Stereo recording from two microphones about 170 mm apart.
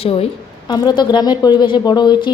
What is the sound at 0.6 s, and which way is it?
Speech, 25° left (ahead or behind).